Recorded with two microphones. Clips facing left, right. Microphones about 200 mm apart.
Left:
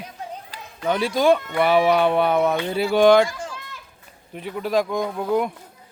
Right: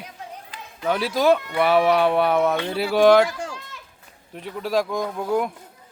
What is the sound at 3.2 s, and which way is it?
Sheep, 65° right (ahead or behind).